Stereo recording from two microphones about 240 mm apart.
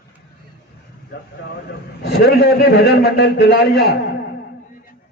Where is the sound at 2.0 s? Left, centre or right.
Left.